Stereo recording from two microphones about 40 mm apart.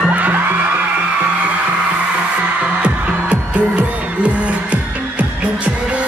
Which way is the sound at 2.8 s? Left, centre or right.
Right.